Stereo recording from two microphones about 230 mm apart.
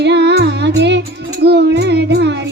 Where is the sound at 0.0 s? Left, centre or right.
Right.